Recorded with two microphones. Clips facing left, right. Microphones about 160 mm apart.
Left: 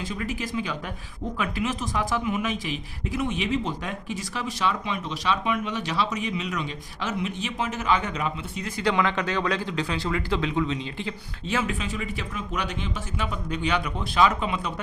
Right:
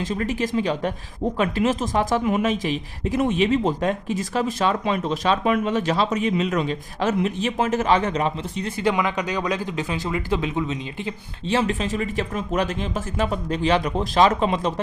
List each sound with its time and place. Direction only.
0.1 s speech: 40° right (ahead or behind); by 11.1 s 20° right (ahead or behind)
11.5 s speech: 35° right (ahead or behind)